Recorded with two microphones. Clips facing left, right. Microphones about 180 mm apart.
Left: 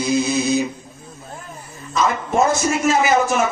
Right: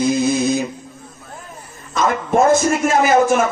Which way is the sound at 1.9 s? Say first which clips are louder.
Right 2 dB; 50° right (ahead or behind).